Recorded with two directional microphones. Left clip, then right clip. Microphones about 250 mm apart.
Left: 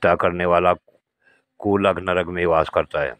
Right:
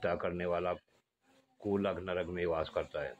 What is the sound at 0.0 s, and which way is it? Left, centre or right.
Speech, left.